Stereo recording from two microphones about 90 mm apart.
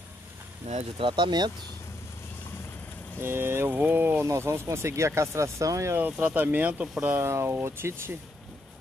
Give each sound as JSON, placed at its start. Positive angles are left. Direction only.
{"t": 0.9, "sound": "speech", "side_deg": -65}
{"t": 3.2, "sound": "speech", "side_deg": -25}
{"t": 5.9, "sound": "speech", "side_deg": -20}